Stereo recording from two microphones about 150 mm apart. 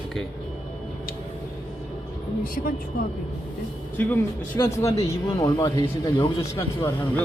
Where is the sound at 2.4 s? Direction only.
75° left (ahead or behind).